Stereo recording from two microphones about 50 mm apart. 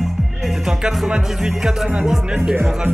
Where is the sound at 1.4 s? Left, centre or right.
Centre.